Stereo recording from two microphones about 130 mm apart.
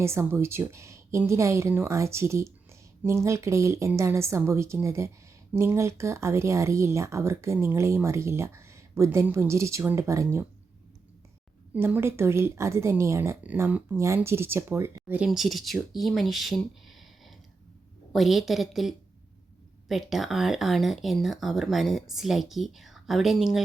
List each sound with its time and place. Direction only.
0.0 s speech: 20° right (ahead or behind)
11.7 s speech: 15° right (ahead or behind)
15.3 s speech: centre (ahead or behind)
18.1 s speech: centre (ahead or behind)